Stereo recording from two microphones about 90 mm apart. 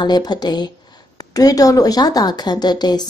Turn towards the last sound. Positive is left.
turn(degrees=50)  # may be behind; listen again after turning